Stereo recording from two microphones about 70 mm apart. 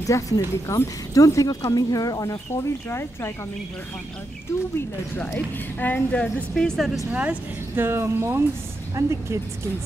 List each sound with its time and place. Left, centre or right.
0.0 s speech: left
2.5 s speech: left
4.7 s a woman's voice: left
6.5 s a woman's voice: centre
7.1 s speech: centre
7.7 s speech: right